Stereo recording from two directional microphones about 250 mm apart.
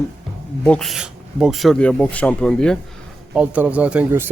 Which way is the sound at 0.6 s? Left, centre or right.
Centre.